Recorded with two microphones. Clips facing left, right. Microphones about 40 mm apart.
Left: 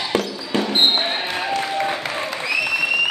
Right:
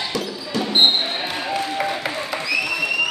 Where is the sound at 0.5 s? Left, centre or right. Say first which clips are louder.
Even; left.